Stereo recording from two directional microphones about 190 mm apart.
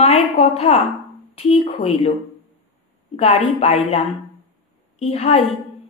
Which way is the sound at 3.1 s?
35° left (ahead or behind).